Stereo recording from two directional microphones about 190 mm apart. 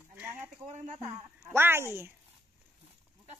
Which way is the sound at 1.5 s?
10° right (ahead or behind).